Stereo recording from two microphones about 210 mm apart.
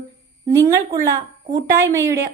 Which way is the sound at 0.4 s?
15° right (ahead or behind).